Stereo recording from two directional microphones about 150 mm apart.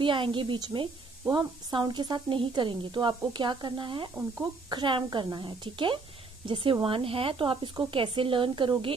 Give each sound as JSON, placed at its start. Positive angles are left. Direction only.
{"t": 0.0, "sound": "speech", "side_deg": -35}